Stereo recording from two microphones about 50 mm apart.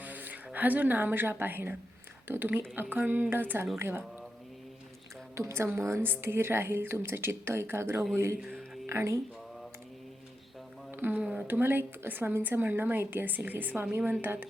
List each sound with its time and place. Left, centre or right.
0.0 s a woman's voice: right
5.3 s a woman's voice: right
6.0 s a woman's voice: right
8.4 s a sound: centre
8.9 s a woman's voice: right
11.1 s speech: right
11.6 s a woman's voice: right